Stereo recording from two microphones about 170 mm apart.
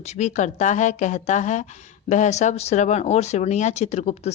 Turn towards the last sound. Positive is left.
turn(degrees=40)  # may be behind; listen again after turning